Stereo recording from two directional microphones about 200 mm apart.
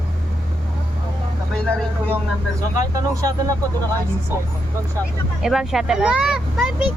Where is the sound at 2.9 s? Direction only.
15° right (ahead or behind).